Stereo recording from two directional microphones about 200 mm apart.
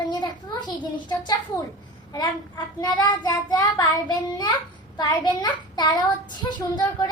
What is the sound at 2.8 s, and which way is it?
A child's voice, 20° left (ahead or behind).